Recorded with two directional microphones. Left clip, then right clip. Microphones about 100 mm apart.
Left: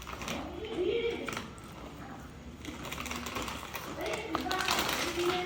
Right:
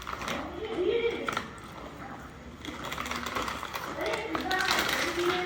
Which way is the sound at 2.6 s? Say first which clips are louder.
Right 5 dB; 25° left (ahead or behind).